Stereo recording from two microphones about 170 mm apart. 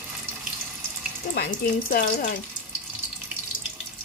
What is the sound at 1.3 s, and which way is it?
Speech, 65° left (ahead or behind).